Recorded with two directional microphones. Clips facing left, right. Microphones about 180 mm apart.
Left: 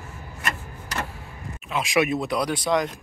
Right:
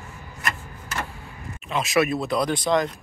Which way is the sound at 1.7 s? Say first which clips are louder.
Right 1 dB; 15° left (ahead or behind).